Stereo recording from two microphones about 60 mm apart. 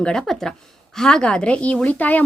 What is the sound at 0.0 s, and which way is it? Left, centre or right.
A woman's voice, centre.